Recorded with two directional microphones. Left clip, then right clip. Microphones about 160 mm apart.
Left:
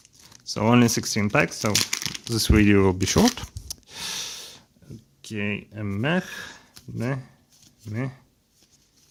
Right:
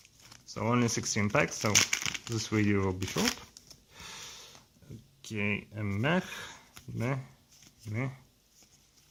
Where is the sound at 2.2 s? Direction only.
40° left (ahead or behind).